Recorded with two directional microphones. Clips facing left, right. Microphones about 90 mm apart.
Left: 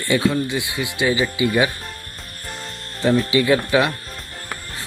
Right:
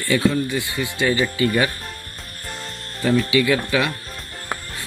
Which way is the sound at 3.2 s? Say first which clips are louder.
Left 1 dB; 30° left (ahead or behind).